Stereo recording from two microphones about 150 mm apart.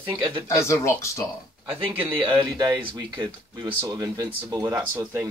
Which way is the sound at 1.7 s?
15° right (ahead or behind).